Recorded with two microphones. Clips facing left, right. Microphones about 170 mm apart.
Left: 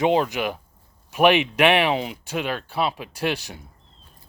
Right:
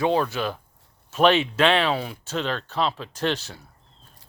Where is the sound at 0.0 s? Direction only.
15° left (ahead or behind).